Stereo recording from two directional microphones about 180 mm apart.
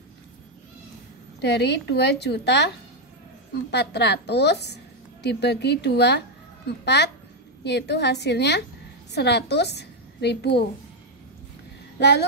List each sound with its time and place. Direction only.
1.4 s a woman's voice: 70° left (ahead or behind)
12.0 s a woman's voice: 70° left (ahead or behind)